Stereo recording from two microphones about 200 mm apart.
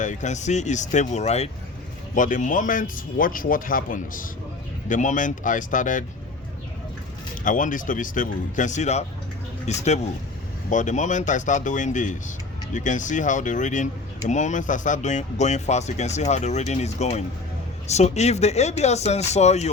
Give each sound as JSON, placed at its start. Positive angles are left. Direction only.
{"t": 0.0, "sound": "speech", "side_deg": 40}
{"t": 7.4, "sound": "speech", "side_deg": 40}